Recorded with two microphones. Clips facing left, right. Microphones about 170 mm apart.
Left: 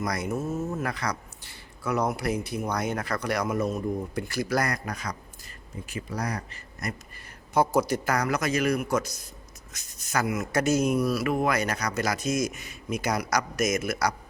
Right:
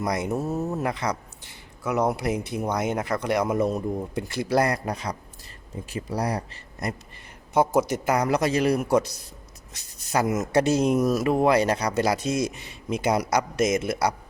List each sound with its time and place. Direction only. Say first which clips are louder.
0.0 s speech: right 3 dB; 25° right (ahead or behind)
0.3 s a man's voice: right 3 dB; 35° right (ahead or behind)
0.7 s a man's voice: right 3 dB; 20° right (ahead or behind)
10.9 s speech: right 4 dB; 45° right (ahead or behind); by 14.2 s 30° right (ahead or behind)